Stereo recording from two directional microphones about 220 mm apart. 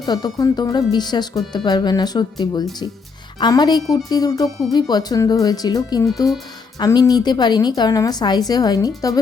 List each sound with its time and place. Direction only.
0.0 s a woman's voice: 15° left (ahead or behind)